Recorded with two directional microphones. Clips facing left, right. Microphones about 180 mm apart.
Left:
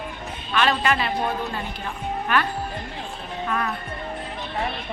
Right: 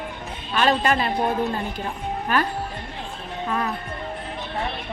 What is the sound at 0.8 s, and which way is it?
Speech, 40° right (ahead or behind).